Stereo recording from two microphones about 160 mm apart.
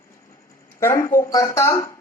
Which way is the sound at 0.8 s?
15° left (ahead or behind).